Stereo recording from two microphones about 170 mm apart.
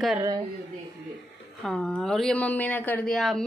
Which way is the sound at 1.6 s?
5° left (ahead or behind).